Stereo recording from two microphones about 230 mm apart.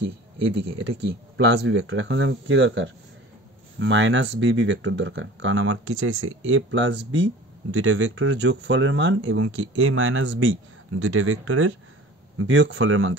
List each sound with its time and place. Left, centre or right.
0.7 s speech: right